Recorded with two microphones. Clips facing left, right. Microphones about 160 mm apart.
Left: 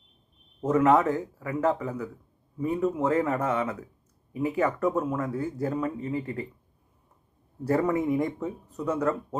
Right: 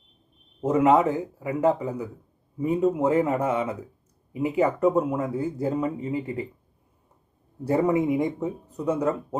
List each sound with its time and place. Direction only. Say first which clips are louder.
0.6 s speech: right 2 dB; 15° right (ahead or behind)
7.7 s speech: right 3 dB; 20° right (ahead or behind)